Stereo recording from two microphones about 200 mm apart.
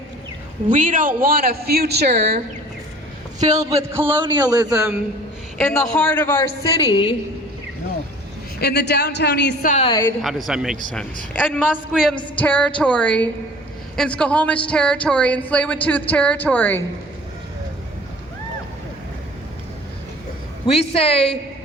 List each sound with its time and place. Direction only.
0.7 s a man's voice: 40° right (ahead or behind)
3.6 s speech: 15° right (ahead or behind)
4.2 s a man's voice: 20° right (ahead or behind)
5.5 s speech: centre (ahead or behind); by 7.2 s 20° left (ahead or behind)
8.6 s speech: 55° left (ahead or behind)
9.6 s a woman's voice: 35° left (ahead or behind)
9.9 s speech: 15° left (ahead or behind)
10.2 s a man's voice: centre (ahead or behind)
20.7 s a woman's voice: 30° left (ahead or behind)